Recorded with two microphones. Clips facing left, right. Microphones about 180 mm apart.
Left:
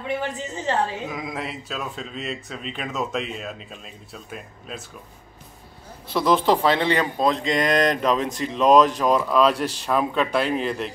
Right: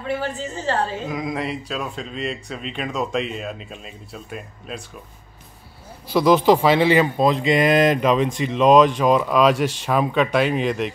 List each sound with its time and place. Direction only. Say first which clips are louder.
0.0 s a woman's voice: right 2 dB; 20° left (ahead or behind)
1.0 s speech: right 5 dB; centre (ahead or behind)
6.1 s speech: right 4 dB; centre (ahead or behind)